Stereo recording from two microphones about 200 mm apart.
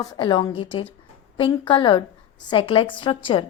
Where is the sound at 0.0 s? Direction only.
20° left (ahead or behind).